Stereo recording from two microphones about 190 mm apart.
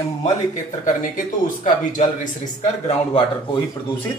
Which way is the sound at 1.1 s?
45° left (ahead or behind).